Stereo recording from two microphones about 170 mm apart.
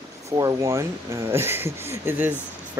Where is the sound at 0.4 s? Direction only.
20° right (ahead or behind).